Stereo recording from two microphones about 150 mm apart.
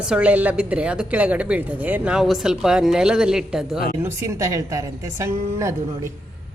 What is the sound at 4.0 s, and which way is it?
A woman's voice, 15° right (ahead or behind).